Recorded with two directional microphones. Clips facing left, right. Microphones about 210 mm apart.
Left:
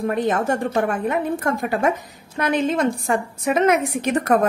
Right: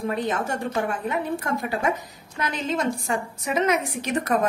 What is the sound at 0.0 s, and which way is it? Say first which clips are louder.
A woman's voice: left 5 dB; 55° left (ahead or behind).